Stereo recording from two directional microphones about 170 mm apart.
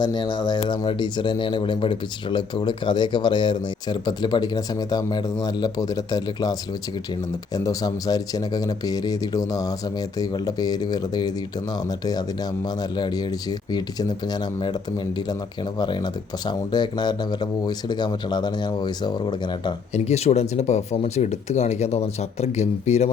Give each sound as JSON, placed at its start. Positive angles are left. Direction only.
{"t": 0.0, "sound": "speech", "side_deg": 25}
{"t": 12.6, "sound": "speech", "side_deg": 25}
{"t": 15.8, "sound": "speech", "side_deg": 25}
{"t": 19.9, "sound": "speech", "side_deg": 40}